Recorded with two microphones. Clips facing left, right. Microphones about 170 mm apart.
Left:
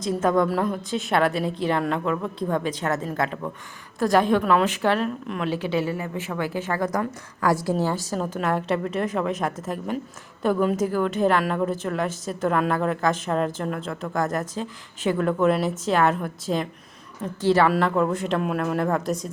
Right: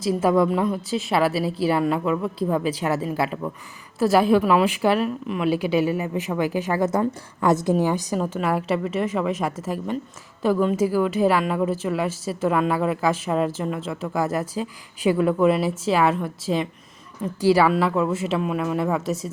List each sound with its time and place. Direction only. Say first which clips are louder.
0.0 s a woman's voice: right 2 dB; 5° right (ahead or behind)
8.4 s a woman's voice: left 1 dB; 5° right (ahead or behind)